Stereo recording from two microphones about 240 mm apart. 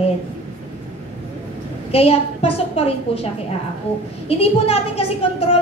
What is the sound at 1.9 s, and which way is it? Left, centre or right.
A woman's voice, left.